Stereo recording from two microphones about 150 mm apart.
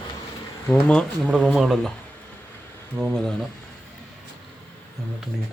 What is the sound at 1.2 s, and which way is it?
Speech, 10° right (ahead or behind).